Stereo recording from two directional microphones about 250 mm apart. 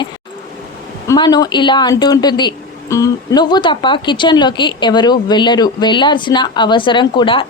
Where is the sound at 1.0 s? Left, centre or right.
Centre.